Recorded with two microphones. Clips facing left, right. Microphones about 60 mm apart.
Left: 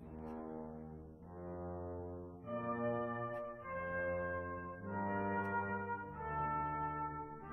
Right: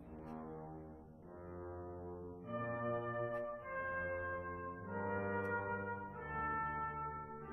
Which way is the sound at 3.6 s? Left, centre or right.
Centre.